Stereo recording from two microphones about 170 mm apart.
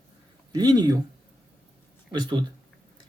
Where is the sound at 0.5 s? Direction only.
20° right (ahead or behind).